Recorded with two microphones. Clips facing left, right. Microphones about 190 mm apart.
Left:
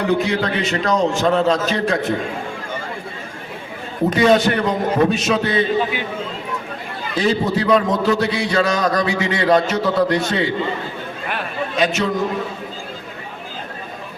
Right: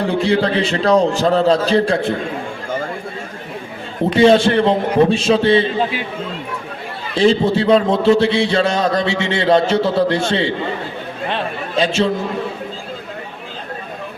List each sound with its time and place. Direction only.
0.0 s a man's voice: 30° right (ahead or behind)
4.1 s a man's voice: 30° right (ahead or behind)
7.2 s a man's voice: 25° right (ahead or behind)
11.3 s chatter: 25° right (ahead or behind)